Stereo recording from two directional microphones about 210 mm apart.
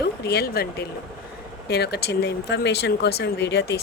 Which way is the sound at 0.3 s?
50° left (ahead or behind).